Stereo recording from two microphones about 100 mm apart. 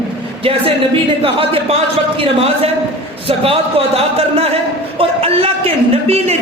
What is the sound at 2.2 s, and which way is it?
A man's voice, 75° right (ahead or behind).